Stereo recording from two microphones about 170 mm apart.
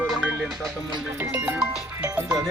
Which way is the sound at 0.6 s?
25° right (ahead or behind).